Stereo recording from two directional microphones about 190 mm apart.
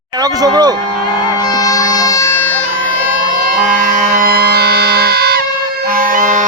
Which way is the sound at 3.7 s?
45° right (ahead or behind).